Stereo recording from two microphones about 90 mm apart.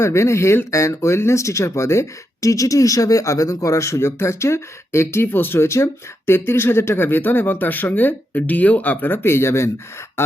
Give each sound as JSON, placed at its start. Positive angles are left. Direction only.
{"t": 0.0, "sound": "speech", "side_deg": 30}